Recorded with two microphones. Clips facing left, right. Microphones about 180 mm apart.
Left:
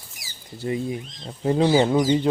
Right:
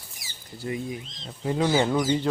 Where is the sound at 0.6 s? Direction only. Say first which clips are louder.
Left 5 dB; 25° left (ahead or behind).